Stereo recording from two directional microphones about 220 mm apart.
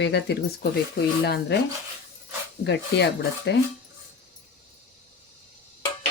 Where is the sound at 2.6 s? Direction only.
50° left (ahead or behind).